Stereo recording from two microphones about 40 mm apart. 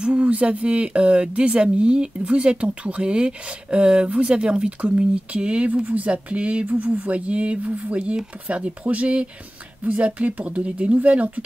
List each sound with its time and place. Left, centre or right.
0.0 s speech: right
6.7 s speech: right